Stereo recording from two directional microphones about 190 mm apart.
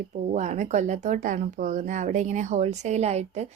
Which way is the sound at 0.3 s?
40° right (ahead or behind).